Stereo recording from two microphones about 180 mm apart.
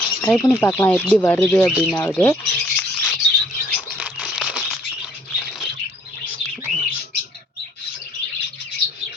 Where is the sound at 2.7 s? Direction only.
5° left (ahead or behind).